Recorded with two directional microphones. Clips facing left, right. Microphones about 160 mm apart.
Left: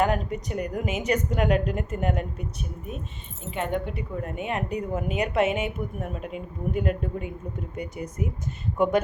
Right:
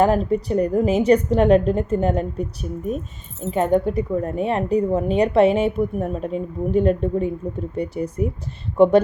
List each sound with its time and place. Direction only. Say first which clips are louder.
0.0 s speech: right 7 dB; 35° right (ahead or behind)